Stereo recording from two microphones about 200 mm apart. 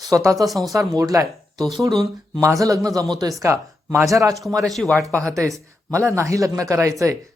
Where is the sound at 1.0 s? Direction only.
15° right (ahead or behind).